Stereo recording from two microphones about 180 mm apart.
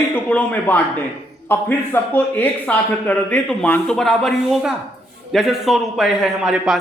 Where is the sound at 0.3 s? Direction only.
10° left (ahead or behind).